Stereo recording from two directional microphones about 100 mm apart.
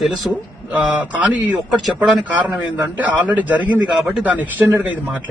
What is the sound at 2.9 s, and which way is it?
A man's voice, 15° right (ahead or behind).